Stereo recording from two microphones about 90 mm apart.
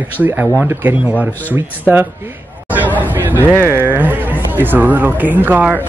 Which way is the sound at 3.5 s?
25° right (ahead or behind).